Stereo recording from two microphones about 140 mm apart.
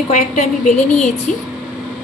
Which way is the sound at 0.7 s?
10° left (ahead or behind).